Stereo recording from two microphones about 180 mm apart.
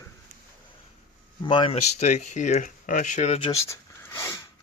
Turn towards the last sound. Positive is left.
turn(degrees=15)  # may be behind; listen again after turning